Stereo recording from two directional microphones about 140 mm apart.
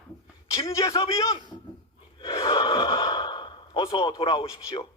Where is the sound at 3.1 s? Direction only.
35° left (ahead or behind).